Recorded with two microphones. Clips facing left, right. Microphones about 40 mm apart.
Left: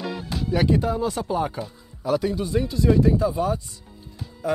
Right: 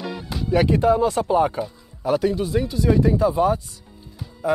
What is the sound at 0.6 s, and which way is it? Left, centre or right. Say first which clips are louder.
Speech: right 5 dB; centre.